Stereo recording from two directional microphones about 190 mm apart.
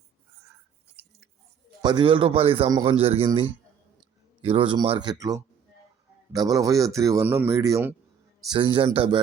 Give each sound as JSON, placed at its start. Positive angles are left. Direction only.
{"t": 1.8, "sound": "speech", "side_deg": -25}
{"t": 3.0, "sound": "speech", "side_deg": -30}
{"t": 4.4, "sound": "a man's voice", "side_deg": -25}
{"t": 8.4, "sound": "speech", "side_deg": -25}